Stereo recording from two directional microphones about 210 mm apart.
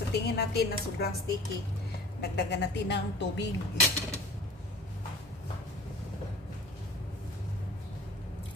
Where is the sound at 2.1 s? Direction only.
50° left (ahead or behind).